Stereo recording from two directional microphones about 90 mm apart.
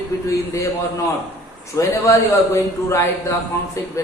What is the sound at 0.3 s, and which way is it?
Speech, 35° left (ahead or behind).